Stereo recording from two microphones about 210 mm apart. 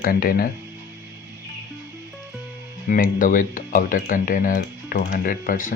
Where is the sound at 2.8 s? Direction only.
40° left (ahead or behind).